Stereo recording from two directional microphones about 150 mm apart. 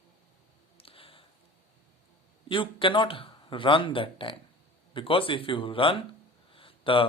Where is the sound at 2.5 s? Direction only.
35° left (ahead or behind).